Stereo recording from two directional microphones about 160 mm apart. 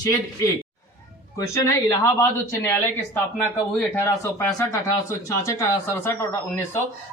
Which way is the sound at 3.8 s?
15° left (ahead or behind).